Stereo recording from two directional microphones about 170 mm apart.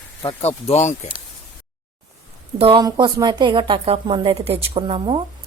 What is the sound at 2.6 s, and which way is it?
A woman's voice, 30° right (ahead or behind).